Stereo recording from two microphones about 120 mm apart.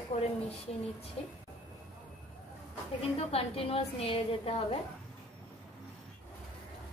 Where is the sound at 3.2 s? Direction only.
55° left (ahead or behind).